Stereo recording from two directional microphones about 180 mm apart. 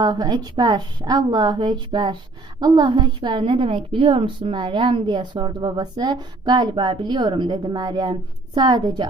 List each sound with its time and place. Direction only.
0.0 s a woman's voice: 25° right (ahead or behind)